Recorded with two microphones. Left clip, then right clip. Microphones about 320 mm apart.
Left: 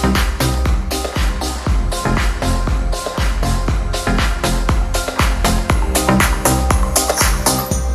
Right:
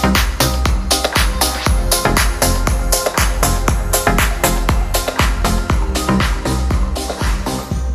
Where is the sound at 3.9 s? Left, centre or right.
Right.